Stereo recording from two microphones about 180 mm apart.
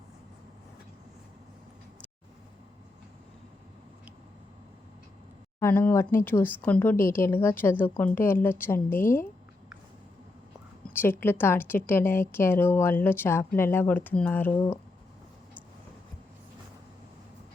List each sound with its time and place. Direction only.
5.5 s a woman's voice: 10° left (ahead or behind)
10.8 s a woman's voice: 10° left (ahead or behind)